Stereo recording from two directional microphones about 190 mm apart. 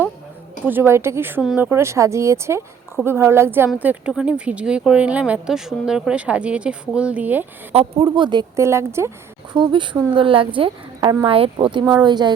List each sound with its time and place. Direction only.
0.6 s speech: 10° right (ahead or behind)
7.7 s speech: 30° right (ahead or behind)